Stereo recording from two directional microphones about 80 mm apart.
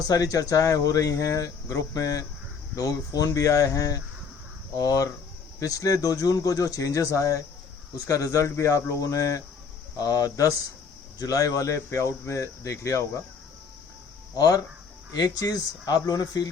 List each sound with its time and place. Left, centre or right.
0.0 s speech: left
14.3 s speech: left